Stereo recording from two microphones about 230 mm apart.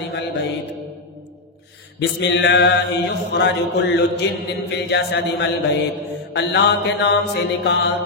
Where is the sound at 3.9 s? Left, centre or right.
Left.